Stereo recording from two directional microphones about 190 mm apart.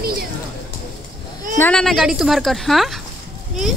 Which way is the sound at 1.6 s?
5° left (ahead or behind).